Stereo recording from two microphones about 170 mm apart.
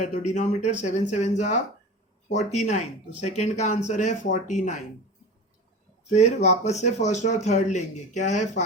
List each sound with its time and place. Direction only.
0.0 s a man's voice: 45° left (ahead or behind)
6.1 s a man's voice: 40° left (ahead or behind)